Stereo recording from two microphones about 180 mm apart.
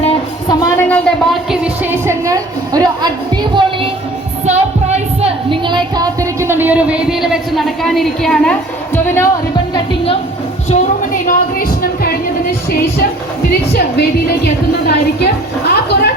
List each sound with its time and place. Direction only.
0.0 s a sound: 25° left (ahead or behind)
0.9 s speech: 10° left (ahead or behind)
1.5 s a woman's voice: 5° right (ahead or behind)
4.4 s a sound: 40° right (ahead or behind); by 8.5 s centre (ahead or behind)
9.0 s speech: 15° left (ahead or behind)
10.7 s speech: 45° left (ahead or behind)
13.5 s a woman's voice: 65° left (ahead or behind)